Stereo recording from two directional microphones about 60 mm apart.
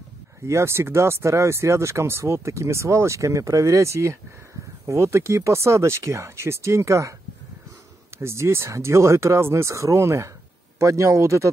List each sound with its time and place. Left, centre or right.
0.5 s speech: right
8.2 s a man's voice: right